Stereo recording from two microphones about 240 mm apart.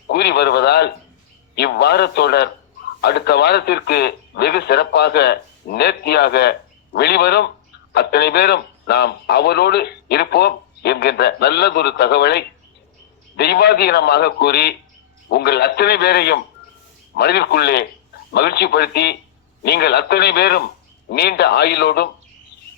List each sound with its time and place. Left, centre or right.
0.1 s a man's voice: left